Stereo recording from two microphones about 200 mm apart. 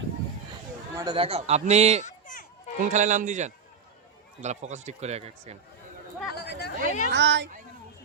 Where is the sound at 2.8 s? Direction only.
40° right (ahead or behind).